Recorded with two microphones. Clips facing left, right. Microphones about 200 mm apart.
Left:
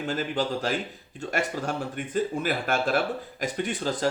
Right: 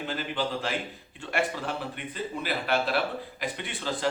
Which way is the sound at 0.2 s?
45° left (ahead or behind).